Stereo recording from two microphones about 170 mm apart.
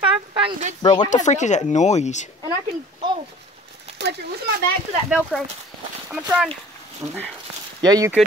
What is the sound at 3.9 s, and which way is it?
Speech, 80° right.